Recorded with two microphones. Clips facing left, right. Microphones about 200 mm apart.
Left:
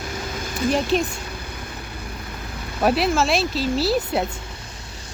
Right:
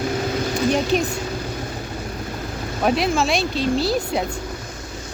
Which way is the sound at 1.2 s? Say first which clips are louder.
Right 7 dB; 55° right (ahead or behind).